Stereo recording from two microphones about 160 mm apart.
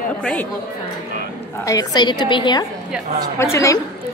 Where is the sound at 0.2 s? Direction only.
5° left (ahead or behind).